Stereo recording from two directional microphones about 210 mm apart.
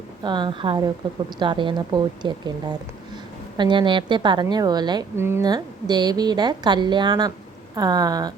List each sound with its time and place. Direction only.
0.2 s a woman's voice: 20° right (ahead or behind)